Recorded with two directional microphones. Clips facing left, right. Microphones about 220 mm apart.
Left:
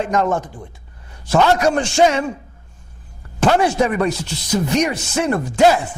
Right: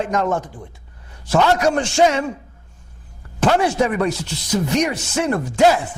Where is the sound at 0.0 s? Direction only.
20° left (ahead or behind).